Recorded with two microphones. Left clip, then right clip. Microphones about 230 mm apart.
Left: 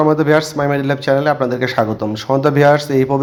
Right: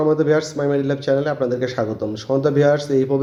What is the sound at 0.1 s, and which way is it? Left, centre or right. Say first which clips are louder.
Speech: left 4 dB; left.